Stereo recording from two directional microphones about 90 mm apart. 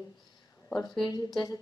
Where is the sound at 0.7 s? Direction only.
10° left (ahead or behind).